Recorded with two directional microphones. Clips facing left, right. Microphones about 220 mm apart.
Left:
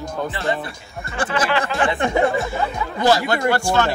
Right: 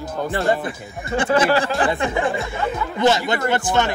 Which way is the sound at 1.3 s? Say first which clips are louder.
Right 4 dB; 40° right (ahead or behind).